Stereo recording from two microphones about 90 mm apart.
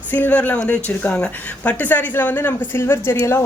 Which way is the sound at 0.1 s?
20° left (ahead or behind).